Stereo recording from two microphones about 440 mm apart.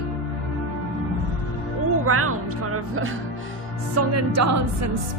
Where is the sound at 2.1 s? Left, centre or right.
Right.